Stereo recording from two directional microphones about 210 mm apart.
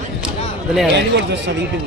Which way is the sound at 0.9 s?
55° right (ahead or behind).